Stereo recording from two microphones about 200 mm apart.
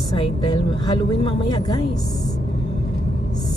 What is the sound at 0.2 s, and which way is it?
A woman's voice, 25° left (ahead or behind).